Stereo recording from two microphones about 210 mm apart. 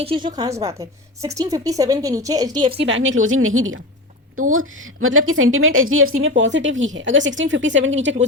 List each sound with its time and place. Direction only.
0.0 s a woman's voice: 25° right (ahead or behind)
2.8 s a woman's voice: 65° right (ahead or behind)